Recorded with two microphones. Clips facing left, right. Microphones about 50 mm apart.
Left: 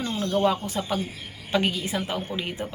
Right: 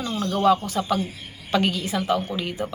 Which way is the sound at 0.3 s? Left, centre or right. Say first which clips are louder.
Right 4 dB; centre.